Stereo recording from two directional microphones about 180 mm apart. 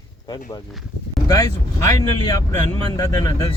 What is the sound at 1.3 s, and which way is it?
Speech, 15° left (ahead or behind).